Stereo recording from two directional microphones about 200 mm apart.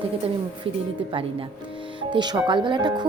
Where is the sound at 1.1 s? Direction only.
25° right (ahead or behind).